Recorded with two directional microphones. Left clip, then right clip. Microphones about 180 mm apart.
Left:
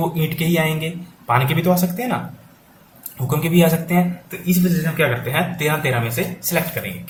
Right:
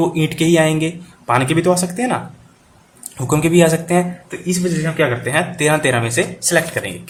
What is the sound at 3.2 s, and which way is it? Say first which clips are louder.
Speech: right 5 dB; 40° right (ahead or behind).